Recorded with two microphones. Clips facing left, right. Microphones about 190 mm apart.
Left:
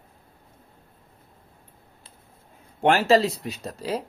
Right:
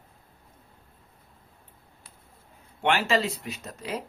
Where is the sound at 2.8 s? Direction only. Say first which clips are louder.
Left 6 dB; 40° left (ahead or behind).